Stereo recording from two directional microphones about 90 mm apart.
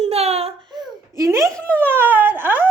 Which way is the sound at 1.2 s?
35° right (ahead or behind).